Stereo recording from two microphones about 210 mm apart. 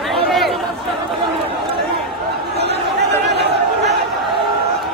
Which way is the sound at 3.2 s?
50° right (ahead or behind).